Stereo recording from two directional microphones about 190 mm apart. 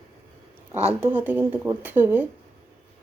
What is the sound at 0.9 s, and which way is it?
Speech, 10° right (ahead or behind).